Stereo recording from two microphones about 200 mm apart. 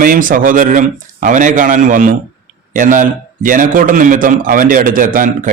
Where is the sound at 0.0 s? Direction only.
45° right (ahead or behind).